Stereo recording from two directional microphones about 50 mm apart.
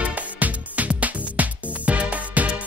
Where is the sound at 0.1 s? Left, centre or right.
Right.